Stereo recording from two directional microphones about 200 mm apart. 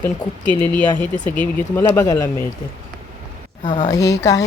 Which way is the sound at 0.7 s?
5° left (ahead or behind).